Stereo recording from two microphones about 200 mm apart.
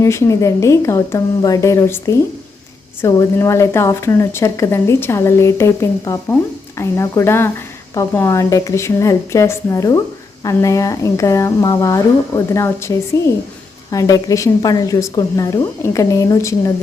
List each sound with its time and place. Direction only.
0.0 s a woman's voice: 15° left (ahead or behind)